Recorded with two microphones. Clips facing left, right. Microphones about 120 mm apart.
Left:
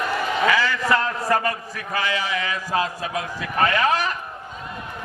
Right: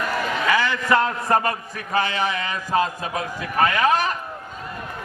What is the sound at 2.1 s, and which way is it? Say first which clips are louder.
Speech: right 1 dB; 55° right (ahead or behind).